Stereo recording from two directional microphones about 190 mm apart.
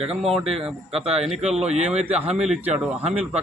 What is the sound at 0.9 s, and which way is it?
Speech, 30° right (ahead or behind).